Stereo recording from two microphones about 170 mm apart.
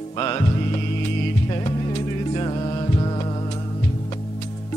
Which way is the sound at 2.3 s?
30° left (ahead or behind).